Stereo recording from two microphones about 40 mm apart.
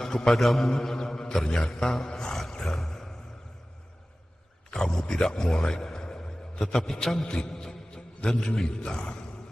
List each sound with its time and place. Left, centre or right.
0.0 s a sound: centre
0.3 s a man's voice: centre
0.7 s mantra: centre
2.0 s dog: left
2.6 s mantra: centre
4.8 s speech: centre
6.6 s mantra: centre
7.2 s music: centre
8.2 s speech: left